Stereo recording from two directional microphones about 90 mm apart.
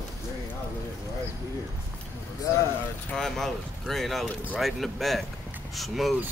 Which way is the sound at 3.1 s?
5° left (ahead or behind).